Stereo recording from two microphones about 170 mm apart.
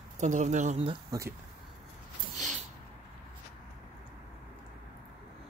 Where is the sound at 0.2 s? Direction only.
45° right (ahead or behind).